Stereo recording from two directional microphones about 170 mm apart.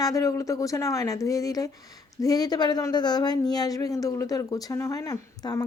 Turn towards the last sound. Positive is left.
turn(degrees=20)  # may be behind; listen again after turning